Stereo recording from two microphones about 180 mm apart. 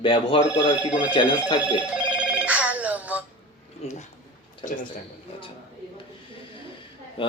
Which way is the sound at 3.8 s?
35° left (ahead or behind).